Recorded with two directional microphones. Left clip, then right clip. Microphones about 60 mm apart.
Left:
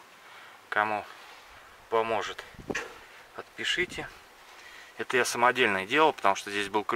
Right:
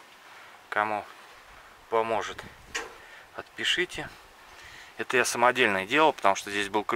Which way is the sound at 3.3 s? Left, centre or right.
Right.